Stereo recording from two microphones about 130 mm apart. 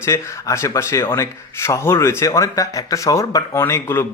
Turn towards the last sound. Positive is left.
turn(degrees=20)  # may be behind; listen again after turning